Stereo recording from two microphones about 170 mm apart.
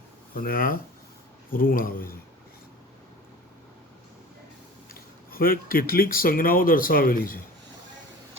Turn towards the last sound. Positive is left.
turn(degrees=55)  # may be behind; listen again after turning